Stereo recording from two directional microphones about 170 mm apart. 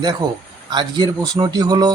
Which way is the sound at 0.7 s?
25° right (ahead or behind).